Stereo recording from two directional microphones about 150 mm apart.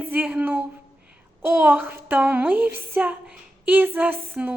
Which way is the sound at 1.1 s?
10° right (ahead or behind).